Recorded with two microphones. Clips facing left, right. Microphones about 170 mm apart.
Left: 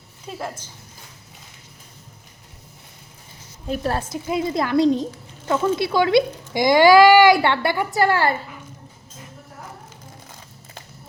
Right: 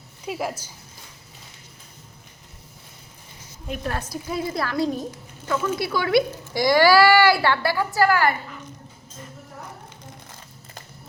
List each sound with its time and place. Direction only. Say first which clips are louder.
0.3 s speech: right 3 dB; 10° right (ahead or behind)
3.7 s a woman's voice: left 5 dB; 35° left (ahead or behind)
4.1 s speech: left 4 dB; 20° left (ahead or behind)